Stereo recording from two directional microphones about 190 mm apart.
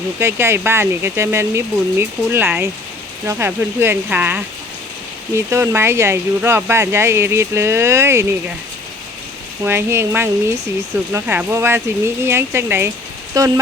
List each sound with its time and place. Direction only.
0.2 s speech: 15° right (ahead or behind)
9.6 s speech: 10° right (ahead or behind)